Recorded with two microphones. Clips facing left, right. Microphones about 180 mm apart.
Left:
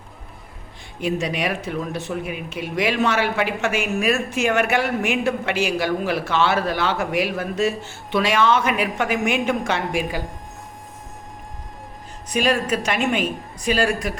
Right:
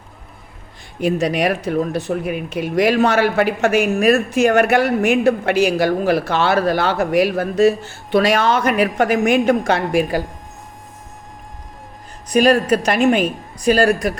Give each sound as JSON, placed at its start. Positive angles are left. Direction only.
{"t": 1.0, "sound": "speech", "side_deg": -40}
{"t": 12.3, "sound": "a man's voice", "side_deg": -40}